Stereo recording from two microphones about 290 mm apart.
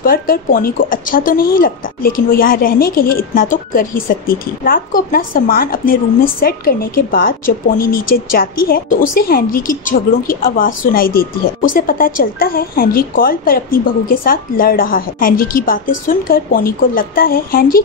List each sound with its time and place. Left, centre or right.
0.0 s a woman's voice: left